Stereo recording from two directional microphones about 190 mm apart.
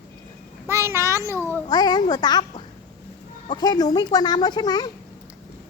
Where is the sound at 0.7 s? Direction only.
15° right (ahead or behind).